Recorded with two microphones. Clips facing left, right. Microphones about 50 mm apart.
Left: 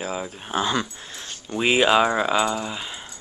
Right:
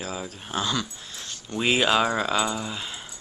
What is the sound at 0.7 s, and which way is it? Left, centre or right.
Dog, left.